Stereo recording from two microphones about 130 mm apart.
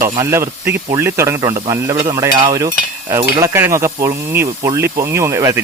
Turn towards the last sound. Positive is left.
turn(degrees=-20)  # may be behind; listen again after turning